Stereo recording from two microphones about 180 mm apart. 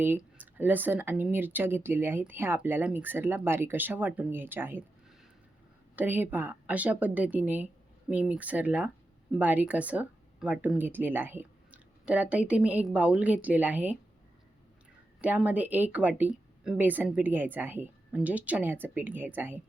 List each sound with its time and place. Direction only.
0.0 s speech: 10° right (ahead or behind)
6.0 s speech: 10° right (ahead or behind)
15.2 s speech: 10° right (ahead or behind)